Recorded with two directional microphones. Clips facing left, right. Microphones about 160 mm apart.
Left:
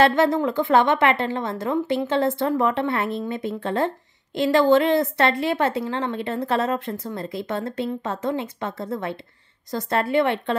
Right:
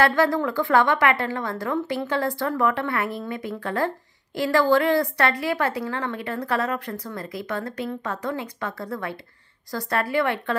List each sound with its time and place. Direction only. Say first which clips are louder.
0.0 s a woman's voice: left 2 dB; 20° left (ahead or behind)